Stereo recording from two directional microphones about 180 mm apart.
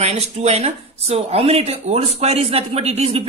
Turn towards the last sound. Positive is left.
turn(degrees=-35)  # may be behind; listen again after turning